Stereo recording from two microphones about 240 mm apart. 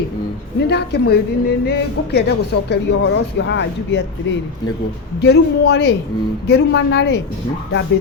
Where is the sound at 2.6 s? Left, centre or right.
Left.